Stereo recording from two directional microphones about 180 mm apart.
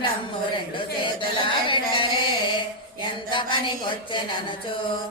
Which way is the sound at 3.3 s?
25° left (ahead or behind).